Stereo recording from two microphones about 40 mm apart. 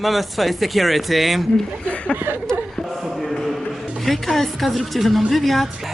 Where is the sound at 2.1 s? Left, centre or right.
Right.